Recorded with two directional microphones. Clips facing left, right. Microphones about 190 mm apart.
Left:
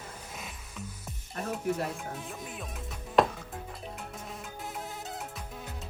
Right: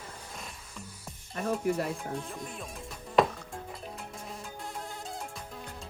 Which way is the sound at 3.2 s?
Centre (ahead or behind).